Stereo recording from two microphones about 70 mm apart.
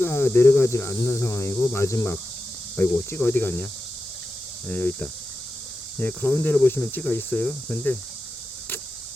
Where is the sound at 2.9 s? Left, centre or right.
Left.